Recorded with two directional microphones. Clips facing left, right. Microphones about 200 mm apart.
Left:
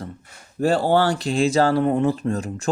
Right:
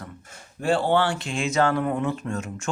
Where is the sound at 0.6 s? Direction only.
40° left (ahead or behind).